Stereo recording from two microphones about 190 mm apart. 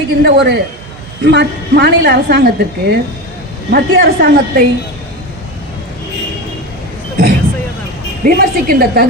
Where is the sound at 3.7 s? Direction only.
55° right (ahead or behind).